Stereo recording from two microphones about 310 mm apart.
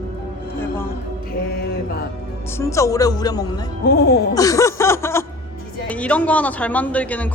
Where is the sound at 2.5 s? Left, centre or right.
Centre.